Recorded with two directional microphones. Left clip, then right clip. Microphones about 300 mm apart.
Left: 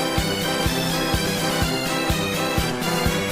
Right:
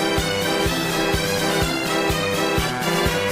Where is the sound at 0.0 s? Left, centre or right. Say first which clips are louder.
Right 2 dB; centre.